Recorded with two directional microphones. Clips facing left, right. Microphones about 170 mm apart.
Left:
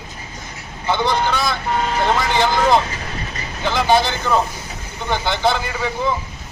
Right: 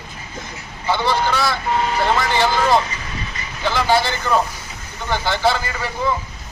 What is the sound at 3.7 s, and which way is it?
A man's voice, 15° left (ahead or behind).